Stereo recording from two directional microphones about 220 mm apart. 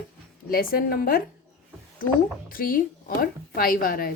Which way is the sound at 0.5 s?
40° left (ahead or behind).